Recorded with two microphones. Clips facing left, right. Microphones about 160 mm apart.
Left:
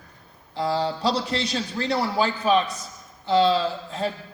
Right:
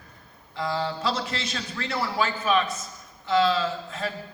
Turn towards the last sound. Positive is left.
turn(degrees=30)  # may be behind; listen again after turning